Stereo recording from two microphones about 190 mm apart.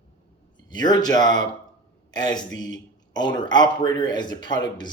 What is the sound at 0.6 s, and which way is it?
A man's voice, 20° left (ahead or behind).